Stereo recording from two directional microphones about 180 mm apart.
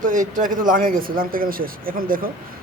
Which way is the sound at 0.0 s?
45° right (ahead or behind).